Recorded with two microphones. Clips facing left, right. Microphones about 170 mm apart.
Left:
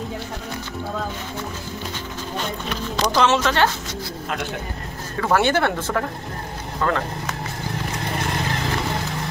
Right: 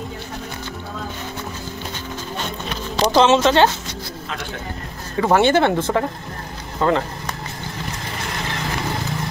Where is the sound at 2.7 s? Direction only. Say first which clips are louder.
Right 5 dB; 25° right (ahead or behind).